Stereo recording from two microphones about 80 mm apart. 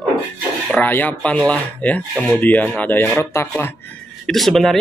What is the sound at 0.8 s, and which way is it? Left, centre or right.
Speech, left.